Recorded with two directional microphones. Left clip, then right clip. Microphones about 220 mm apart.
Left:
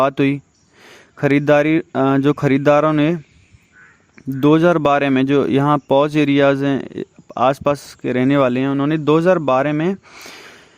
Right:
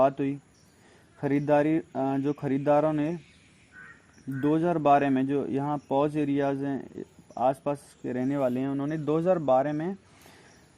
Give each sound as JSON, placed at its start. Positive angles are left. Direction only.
{"t": 0.0, "sound": "speech", "side_deg": 40}
{"t": 4.4, "sound": "speech", "side_deg": 40}